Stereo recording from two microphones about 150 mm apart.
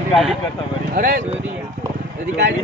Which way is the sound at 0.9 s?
75° right (ahead or behind).